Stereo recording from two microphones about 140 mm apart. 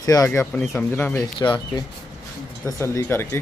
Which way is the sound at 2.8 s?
20° left (ahead or behind).